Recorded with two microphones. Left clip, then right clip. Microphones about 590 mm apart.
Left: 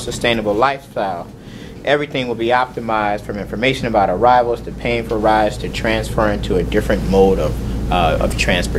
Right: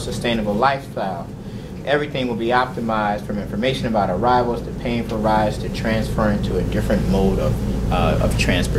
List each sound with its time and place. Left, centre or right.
0.2 s speech: left